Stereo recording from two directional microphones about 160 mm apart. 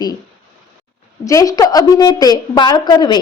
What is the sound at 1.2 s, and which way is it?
A woman's voice, 20° left (ahead or behind).